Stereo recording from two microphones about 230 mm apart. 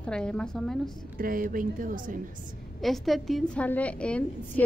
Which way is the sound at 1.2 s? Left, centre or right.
Right.